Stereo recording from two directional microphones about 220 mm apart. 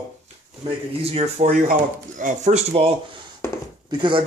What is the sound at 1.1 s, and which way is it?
Speech, 30° right (ahead or behind).